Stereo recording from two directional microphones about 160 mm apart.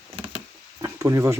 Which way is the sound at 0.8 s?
20° right (ahead or behind).